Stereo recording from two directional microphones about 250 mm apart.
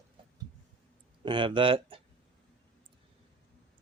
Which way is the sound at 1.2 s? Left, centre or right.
Centre.